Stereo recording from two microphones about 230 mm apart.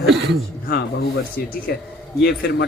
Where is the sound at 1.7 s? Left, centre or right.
Left.